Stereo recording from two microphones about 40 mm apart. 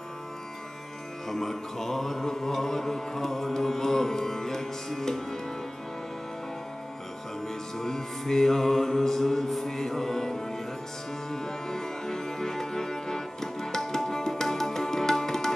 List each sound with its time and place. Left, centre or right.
1.3 s music: centre
7.4 s music: centre